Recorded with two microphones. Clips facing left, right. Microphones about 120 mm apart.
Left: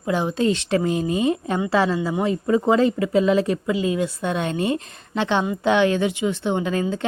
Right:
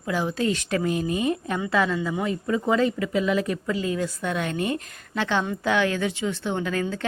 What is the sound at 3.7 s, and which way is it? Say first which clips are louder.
Speech: left 4 dB; 20° left (ahead or behind).